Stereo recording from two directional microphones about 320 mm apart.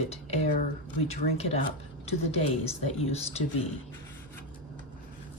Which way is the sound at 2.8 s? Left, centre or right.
Centre.